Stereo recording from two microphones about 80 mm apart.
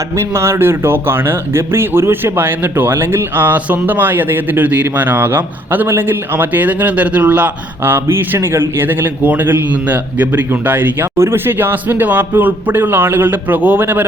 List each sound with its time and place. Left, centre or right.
0.2 s speech: right